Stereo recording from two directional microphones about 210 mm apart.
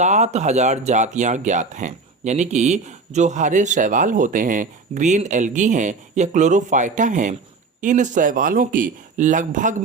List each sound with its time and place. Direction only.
0.0 s speech: 35° right (ahead or behind)